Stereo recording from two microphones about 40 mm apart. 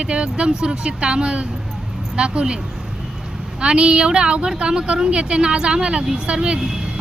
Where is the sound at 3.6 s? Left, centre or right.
Right.